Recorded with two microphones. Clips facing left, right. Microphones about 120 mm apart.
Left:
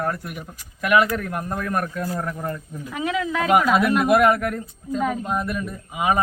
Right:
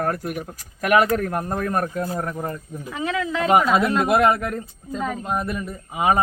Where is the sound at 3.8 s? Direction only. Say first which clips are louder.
Left 1 dB; 25° right (ahead or behind).